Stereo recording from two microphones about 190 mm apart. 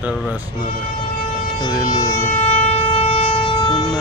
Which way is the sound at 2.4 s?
30° left (ahead or behind).